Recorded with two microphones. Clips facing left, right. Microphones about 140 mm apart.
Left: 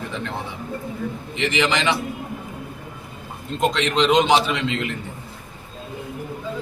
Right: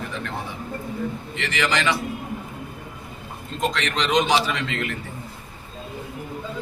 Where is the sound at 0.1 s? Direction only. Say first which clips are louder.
Left 2 dB; 20° left (ahead or behind).